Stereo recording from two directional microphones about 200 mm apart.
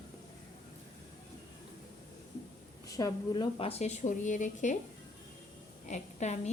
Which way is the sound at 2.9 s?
15° left (ahead or behind).